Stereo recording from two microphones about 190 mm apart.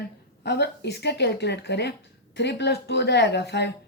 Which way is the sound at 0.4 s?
60° left (ahead or behind).